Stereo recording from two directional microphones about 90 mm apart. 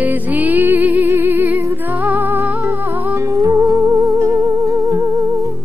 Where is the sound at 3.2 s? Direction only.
35° right (ahead or behind).